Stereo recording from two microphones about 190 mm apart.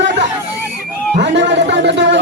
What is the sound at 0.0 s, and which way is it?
Chatter, 65° right (ahead or behind).